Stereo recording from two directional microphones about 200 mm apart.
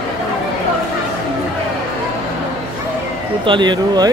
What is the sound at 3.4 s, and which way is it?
Speech, 25° right (ahead or behind).